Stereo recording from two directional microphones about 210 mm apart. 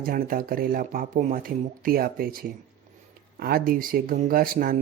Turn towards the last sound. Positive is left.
turn(degrees=-45)  # may be behind; listen again after turning